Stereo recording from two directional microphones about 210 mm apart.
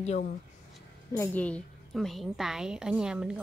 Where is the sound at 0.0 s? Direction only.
30° left (ahead or behind).